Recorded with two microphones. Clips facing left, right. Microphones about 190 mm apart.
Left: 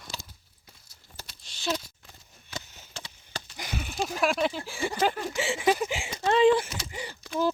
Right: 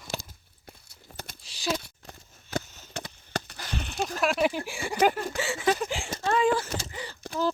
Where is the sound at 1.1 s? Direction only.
70° right (ahead or behind).